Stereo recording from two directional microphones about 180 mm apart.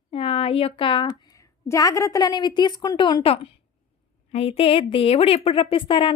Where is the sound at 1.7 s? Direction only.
20° left (ahead or behind).